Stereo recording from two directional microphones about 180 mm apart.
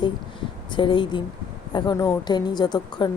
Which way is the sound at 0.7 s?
25° left (ahead or behind).